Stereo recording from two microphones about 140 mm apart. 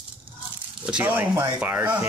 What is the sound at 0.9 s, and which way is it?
A man's voice, 10° right (ahead or behind).